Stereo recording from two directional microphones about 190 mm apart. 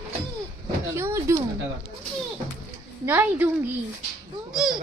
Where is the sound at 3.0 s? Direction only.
10° right (ahead or behind).